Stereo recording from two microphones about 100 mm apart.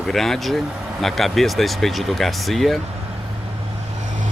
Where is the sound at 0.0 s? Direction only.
Centre (ahead or behind).